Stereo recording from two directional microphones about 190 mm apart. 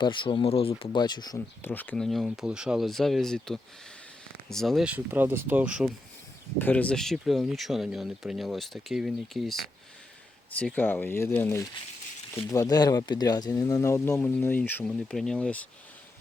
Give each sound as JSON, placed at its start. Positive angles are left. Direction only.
{"t": 0.0, "sound": "speech", "side_deg": 25}
{"t": 1.7, "sound": "speech", "side_deg": 10}
{"t": 6.6, "sound": "speech", "side_deg": 10}
{"t": 10.8, "sound": "speech", "side_deg": 10}